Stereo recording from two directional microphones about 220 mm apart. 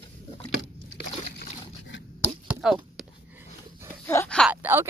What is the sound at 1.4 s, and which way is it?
Dog, 55° left (ahead or behind).